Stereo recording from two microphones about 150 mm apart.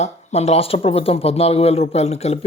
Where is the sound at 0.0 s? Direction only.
45° left (ahead or behind).